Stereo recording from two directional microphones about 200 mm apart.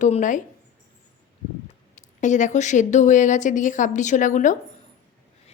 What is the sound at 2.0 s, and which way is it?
A woman's voice, 40° left (ahead or behind).